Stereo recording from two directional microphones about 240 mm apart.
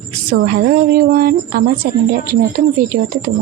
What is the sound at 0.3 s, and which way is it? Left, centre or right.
A woman's voice, right.